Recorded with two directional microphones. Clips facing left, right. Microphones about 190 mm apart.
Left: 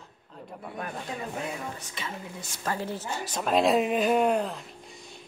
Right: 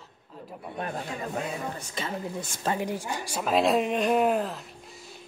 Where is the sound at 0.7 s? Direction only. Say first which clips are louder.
Right 3 dB; 30° right (ahead or behind).